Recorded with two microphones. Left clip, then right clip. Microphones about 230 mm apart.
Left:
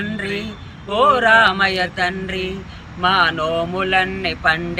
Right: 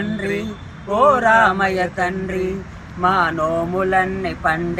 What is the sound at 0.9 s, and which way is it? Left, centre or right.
Speech, left.